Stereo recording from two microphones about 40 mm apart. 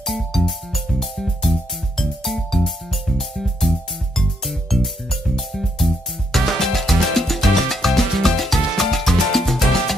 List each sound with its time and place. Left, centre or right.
0.0 s music: centre